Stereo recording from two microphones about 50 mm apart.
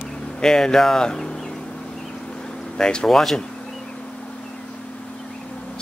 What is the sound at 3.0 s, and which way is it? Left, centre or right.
Speech, centre.